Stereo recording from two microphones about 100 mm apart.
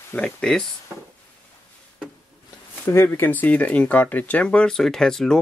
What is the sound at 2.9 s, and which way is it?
Speech, 25° left (ahead or behind).